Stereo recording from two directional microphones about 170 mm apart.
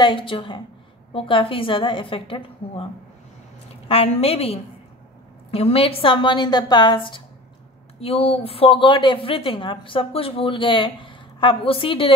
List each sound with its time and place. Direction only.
0.0 s a woman's voice: 30° left (ahead or behind)
3.9 s a woman's voice: 35° left (ahead or behind)